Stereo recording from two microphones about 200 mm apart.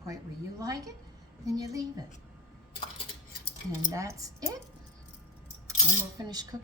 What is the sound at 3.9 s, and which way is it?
Speech, 15° right (ahead or behind).